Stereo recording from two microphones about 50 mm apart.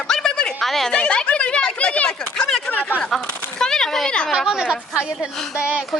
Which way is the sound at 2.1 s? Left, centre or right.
Centre.